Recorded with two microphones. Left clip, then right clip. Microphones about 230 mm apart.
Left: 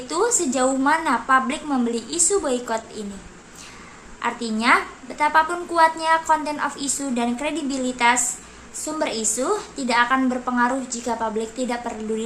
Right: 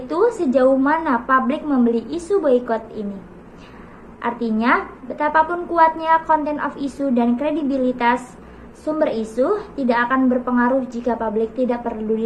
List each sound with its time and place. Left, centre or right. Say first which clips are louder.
0.1 s a woman's voice: right 5 dB; centre
4.2 s a woman's voice: right 2 dB; centre